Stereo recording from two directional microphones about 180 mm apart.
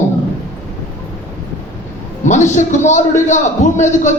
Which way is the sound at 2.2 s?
40° left (ahead or behind).